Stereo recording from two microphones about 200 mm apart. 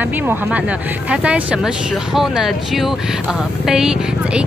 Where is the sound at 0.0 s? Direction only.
10° right (ahead or behind).